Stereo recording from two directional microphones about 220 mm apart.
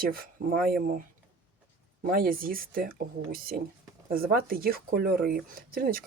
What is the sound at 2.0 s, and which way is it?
Speech, 40° right (ahead or behind).